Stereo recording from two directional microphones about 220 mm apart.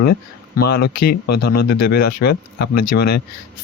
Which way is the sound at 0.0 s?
45° left (ahead or behind).